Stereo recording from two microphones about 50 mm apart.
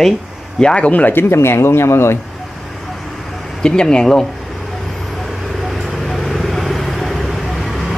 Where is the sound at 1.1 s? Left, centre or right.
Left.